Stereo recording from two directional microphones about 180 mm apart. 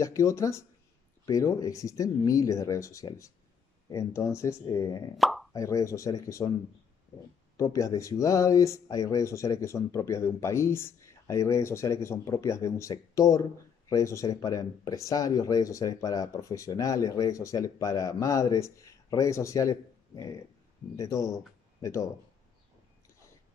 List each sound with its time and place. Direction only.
0.0 s speech: 15° left (ahead or behind)
5.1 s speech: centre (ahead or behind)
5.5 s speech: 20° left (ahead or behind)
7.5 s speech: 20° left (ahead or behind)